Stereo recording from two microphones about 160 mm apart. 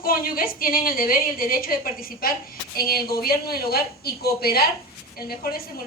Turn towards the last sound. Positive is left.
turn(degrees=70)  # may be behind; listen again after turning